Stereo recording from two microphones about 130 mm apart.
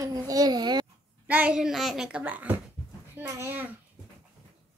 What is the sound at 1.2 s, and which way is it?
A woman's voice, 10° right (ahead or behind).